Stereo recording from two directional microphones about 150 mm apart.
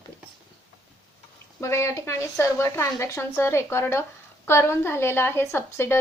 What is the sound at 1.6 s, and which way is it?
A woman's voice, 20° left (ahead or behind).